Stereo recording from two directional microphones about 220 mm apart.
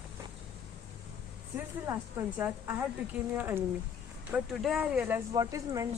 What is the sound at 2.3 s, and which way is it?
Speech, 10° right (ahead or behind).